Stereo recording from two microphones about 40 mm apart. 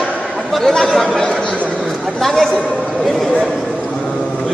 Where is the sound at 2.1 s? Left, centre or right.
Centre.